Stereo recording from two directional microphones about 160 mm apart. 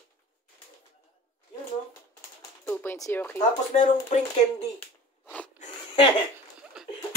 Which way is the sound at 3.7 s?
45° left (ahead or behind).